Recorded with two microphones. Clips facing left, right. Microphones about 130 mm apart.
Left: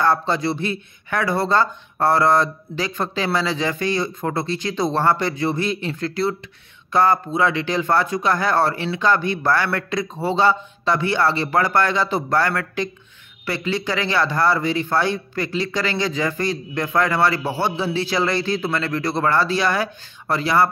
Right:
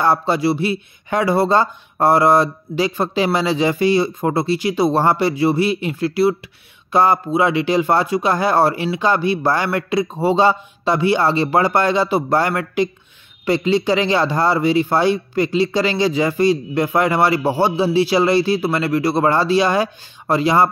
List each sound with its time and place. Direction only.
0.0 s speech: 10° right (ahead or behind)